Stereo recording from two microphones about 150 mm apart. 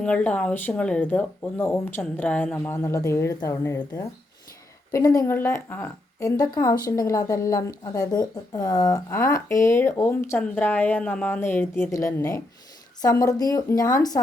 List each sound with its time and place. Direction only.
0.0 s a woman's voice: 10° left (ahead or behind); by 14.2 s 25° left (ahead or behind)